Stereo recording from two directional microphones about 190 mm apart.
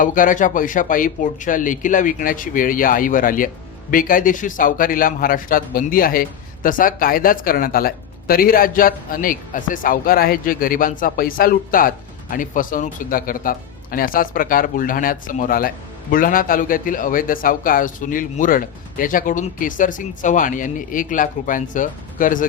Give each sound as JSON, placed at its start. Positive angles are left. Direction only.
{"t": 0.0, "sound": "a man's voice", "side_deg": 45}